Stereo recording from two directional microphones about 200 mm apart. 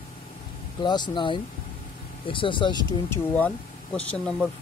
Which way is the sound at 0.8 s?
20° left (ahead or behind).